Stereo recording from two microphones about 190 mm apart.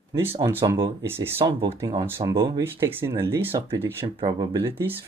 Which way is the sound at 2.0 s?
15° right (ahead or behind).